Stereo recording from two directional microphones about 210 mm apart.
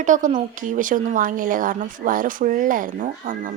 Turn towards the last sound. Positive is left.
turn(degrees=-40)  # may be behind; listen again after turning